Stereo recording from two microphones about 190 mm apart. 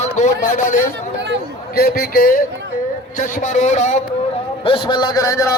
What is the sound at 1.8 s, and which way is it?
A man's voice, 50° left (ahead or behind).